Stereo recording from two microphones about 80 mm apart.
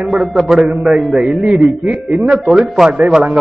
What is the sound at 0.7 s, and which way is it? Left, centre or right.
A man's voice, centre.